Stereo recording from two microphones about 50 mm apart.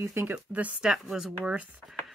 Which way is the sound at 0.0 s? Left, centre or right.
Right.